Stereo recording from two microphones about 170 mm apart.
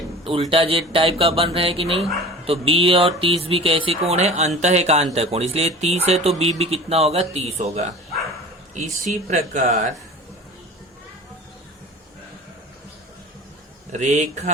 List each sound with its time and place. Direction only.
0.5 s speech: 30° right (ahead or behind)
13.9 s speech: 45° right (ahead or behind)